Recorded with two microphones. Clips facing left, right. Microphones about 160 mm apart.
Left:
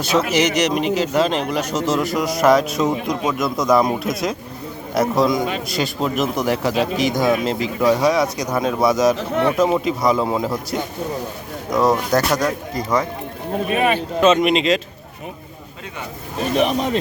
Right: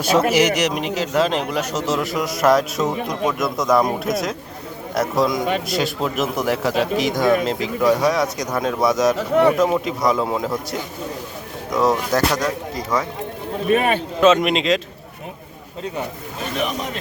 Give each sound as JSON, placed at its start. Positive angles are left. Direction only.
{"t": 0.3, "sound": "a man's voice", "side_deg": -10}
{"t": 9.3, "sound": "a man's voice", "side_deg": -10}
{"t": 9.6, "sound": "a man's voice", "side_deg": 0}
{"t": 13.7, "sound": "speech", "side_deg": -45}
{"t": 14.2, "sound": "a man's voice", "side_deg": 0}
{"t": 16.6, "sound": "speech", "side_deg": 30}